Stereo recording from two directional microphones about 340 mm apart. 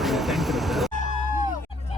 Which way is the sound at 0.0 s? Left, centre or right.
Centre.